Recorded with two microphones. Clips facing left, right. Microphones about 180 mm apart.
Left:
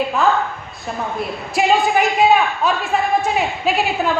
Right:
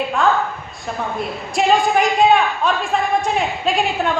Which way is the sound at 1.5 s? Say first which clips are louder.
Even; 5° left (ahead or behind).